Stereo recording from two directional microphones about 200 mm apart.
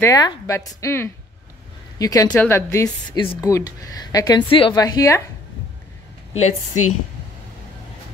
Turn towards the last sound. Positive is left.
turn(degrees=90)